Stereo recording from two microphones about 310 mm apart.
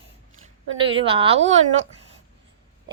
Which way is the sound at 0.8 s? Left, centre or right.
Centre.